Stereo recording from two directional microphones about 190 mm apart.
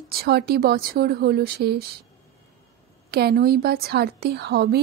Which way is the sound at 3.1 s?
55° right (ahead or behind).